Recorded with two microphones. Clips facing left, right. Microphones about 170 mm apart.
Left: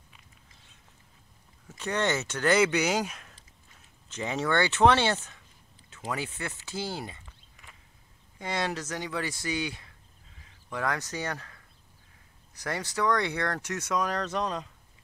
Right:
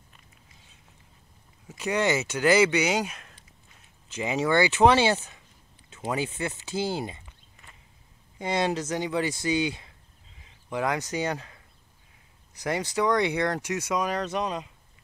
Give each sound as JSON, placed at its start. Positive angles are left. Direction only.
{"t": 1.7, "sound": "speech", "side_deg": -10}
{"t": 5.9, "sound": "speech", "side_deg": -20}
{"t": 8.4, "sound": "speech", "side_deg": -20}